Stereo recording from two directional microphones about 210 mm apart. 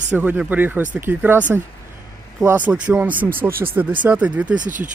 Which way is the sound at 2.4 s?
5° right (ahead or behind).